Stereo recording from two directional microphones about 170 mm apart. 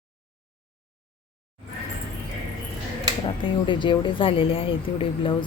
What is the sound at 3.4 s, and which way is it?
A woman's voice, 30° left (ahead or behind).